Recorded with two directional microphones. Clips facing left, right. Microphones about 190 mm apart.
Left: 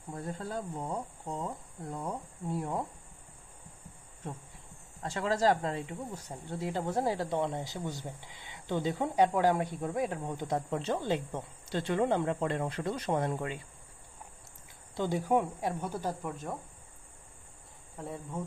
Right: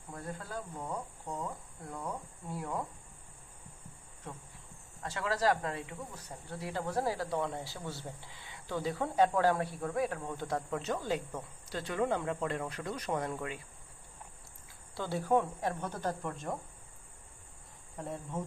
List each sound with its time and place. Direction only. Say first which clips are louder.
0.1 s speech: left 4 dB; 25° left (ahead or behind)
5.0 s speech: left 3 dB; 25° left (ahead or behind)
14.9 s speech: left 2 dB; 15° left (ahead or behind)
17.9 s speech: even; centre (ahead or behind)